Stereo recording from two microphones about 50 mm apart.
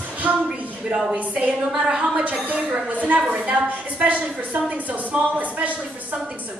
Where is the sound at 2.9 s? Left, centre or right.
Right.